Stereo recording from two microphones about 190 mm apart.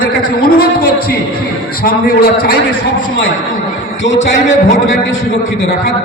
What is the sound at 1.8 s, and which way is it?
Speech, 55° left (ahead or behind).